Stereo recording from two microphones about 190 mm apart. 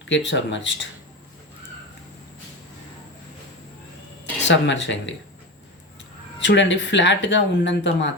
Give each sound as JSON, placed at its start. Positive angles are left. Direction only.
{"t": 0.1, "sound": "speech", "side_deg": 70}
{"t": 4.4, "sound": "speech", "side_deg": 70}
{"t": 6.4, "sound": "speech", "side_deg": 70}